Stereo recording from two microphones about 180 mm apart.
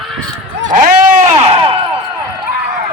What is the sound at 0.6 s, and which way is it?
Speech, 45° right (ahead or behind).